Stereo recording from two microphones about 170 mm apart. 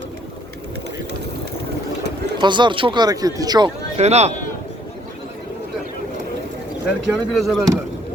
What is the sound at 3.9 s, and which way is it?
Speech, 40° right (ahead or behind).